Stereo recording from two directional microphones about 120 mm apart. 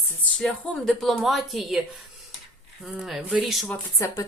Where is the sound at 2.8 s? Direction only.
5° right (ahead or behind).